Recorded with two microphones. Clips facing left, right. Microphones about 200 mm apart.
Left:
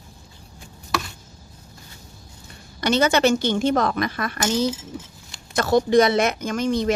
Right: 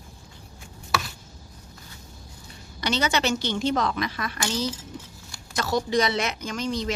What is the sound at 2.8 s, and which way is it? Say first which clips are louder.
Speech: left 7 dB; 50° left (ahead or behind).